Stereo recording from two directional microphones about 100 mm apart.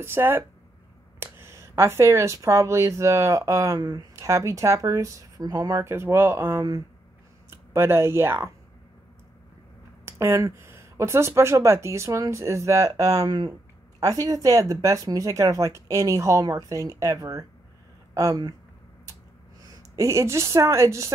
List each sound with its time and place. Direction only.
0.0 s speech: 20° right (ahead or behind)
10.0 s speech: 25° right (ahead or behind)
20.0 s speech: 30° right (ahead or behind)